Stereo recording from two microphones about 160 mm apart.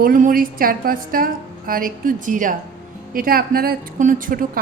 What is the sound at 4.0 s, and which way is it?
Speech, 55° right (ahead or behind).